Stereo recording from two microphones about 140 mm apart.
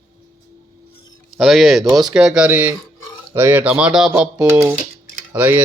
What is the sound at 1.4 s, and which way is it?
Speech, centre (ahead or behind).